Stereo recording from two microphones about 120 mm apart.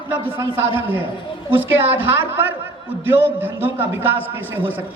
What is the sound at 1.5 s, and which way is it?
A man's voice, 15° right (ahead or behind).